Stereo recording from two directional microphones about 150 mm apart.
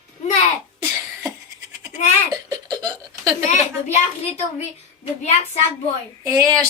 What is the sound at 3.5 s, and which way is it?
Speech, 50° left (ahead or behind).